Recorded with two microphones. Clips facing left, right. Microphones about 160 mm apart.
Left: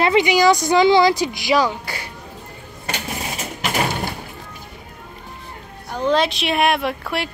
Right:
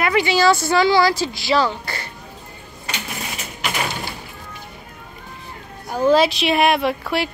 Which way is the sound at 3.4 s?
45° left (ahead or behind).